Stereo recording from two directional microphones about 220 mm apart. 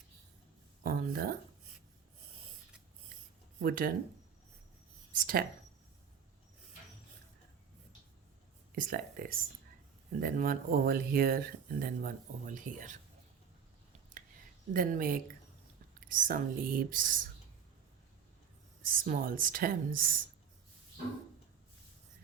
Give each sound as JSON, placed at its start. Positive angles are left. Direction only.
{"t": 0.9, "sound": "speech", "side_deg": -45}
{"t": 3.6, "sound": "speech", "side_deg": -40}
{"t": 5.1, "sound": "speech", "side_deg": -40}
{"t": 8.7, "sound": "speech", "side_deg": -40}
{"t": 14.7, "sound": "speech", "side_deg": -40}
{"t": 18.8, "sound": "speech", "side_deg": -40}